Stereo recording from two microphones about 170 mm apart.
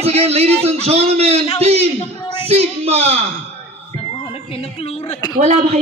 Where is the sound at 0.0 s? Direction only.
35° right (ahead or behind).